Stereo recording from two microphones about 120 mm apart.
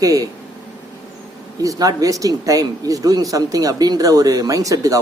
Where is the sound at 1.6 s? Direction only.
30° right (ahead or behind).